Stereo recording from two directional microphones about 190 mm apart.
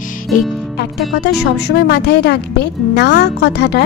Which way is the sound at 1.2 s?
60° left (ahead or behind).